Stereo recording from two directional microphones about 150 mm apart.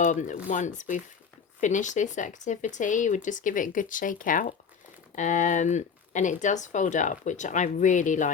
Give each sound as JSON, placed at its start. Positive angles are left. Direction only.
{"t": 0.0, "sound": "speech", "side_deg": 60}